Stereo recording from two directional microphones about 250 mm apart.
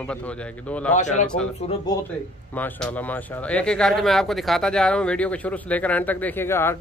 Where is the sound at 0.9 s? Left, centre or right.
Left.